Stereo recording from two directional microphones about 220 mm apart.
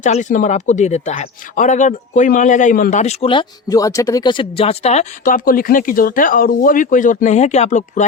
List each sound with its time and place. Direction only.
0.0 s speech: 35° left (ahead or behind)